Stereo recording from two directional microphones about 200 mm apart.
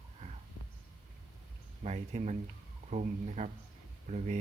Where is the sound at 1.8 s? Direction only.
35° right (ahead or behind).